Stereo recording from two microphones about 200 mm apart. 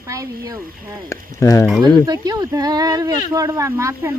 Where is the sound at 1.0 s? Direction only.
15° left (ahead or behind).